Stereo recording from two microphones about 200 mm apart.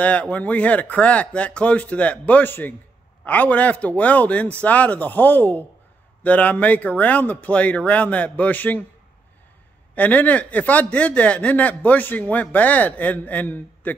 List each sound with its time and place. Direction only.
0.0 s speech: 5° left (ahead or behind)
9.9 s speech: 10° left (ahead or behind)